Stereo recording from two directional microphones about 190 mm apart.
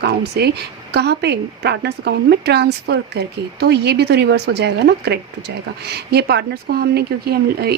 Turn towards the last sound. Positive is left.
turn(degrees=-55)  # may be behind; listen again after turning